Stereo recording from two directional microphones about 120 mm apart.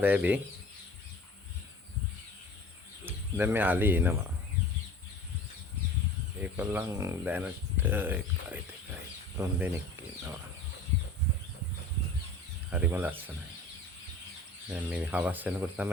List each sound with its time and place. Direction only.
0.0 s speech: 15° right (ahead or behind)
3.1 s speech: 20° right (ahead or behind)
6.4 s speech: 15° right (ahead or behind)
12.7 s speech: 15° right (ahead or behind)
14.7 s speech: 10° right (ahead or behind)